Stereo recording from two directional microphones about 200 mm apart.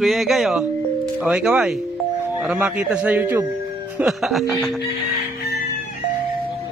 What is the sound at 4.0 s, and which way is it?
Music, centre (ahead or behind).